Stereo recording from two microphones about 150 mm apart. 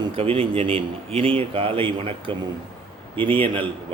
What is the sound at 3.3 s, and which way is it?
Speech, 35° right (ahead or behind).